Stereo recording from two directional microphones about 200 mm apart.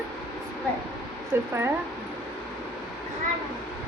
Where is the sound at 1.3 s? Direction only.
10° right (ahead or behind).